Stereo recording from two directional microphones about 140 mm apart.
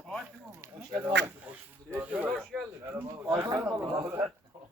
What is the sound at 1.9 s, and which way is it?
Speech, 10° right (ahead or behind).